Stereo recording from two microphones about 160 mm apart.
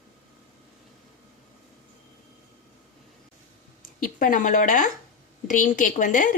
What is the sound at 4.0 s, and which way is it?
A woman's voice, 55° left (ahead or behind).